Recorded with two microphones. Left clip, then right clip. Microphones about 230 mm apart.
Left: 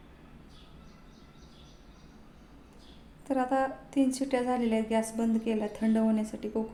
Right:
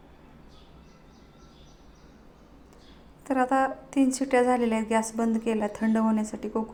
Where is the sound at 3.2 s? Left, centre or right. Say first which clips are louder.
Right 4 dB; centre.